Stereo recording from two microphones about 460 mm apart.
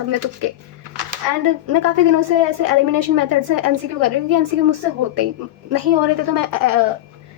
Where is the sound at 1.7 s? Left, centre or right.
Right.